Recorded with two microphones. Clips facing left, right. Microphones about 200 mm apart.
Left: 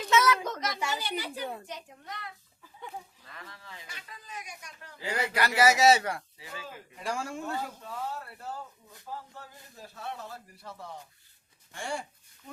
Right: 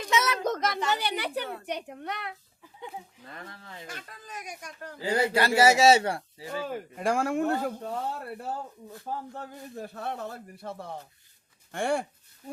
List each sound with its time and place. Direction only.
0.1 s a sound: 20° right (ahead or behind)
0.4 s a sound: 50° right (ahead or behind)
0.9 s a child's voice: 65° right (ahead or behind)
3.2 s speech: 50° right (ahead or behind)
5.0 s a man's voice: 30° right (ahead or behind)
6.7 s speech: 55° right (ahead or behind)